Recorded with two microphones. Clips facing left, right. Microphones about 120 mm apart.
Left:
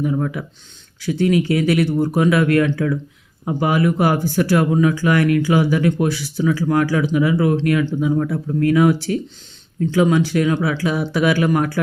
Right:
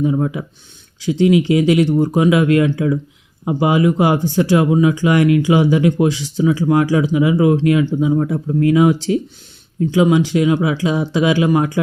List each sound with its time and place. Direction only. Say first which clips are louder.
0.0 s speech: right 3 dB; 20° right (ahead or behind)